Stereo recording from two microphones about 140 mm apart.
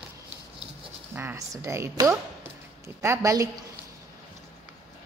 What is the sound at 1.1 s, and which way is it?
A woman's voice, 20° right (ahead or behind).